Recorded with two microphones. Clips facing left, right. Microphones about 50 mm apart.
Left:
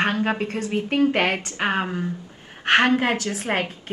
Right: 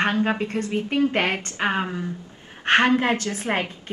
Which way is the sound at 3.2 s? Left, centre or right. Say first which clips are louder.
Even; centre.